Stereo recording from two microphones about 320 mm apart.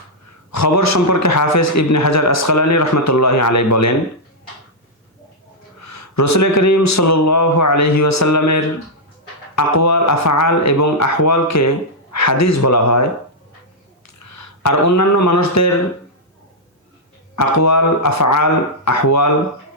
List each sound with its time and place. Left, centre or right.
0.5 s a man's voice: left
5.8 s a man's voice: left
14.2 s speech: left
17.3 s a man's voice: left